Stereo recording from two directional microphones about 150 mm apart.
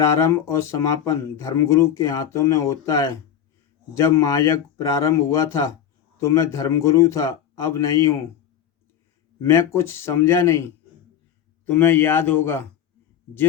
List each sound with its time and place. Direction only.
0.0 s speech: 20° left (ahead or behind)
9.4 s a man's voice: 15° left (ahead or behind)